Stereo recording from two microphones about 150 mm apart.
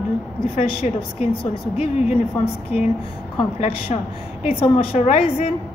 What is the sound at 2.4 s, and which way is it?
Speech, 45° left (ahead or behind).